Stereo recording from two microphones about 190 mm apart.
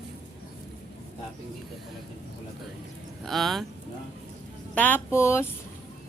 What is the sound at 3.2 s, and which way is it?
Speech, centre (ahead or behind).